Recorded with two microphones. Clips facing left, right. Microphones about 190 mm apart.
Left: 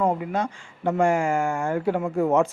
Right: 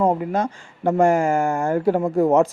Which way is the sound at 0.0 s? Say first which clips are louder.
Right 4 dB; 45° right (ahead or behind).